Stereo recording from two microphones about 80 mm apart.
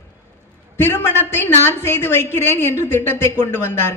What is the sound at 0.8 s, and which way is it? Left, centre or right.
A woman's voice, left.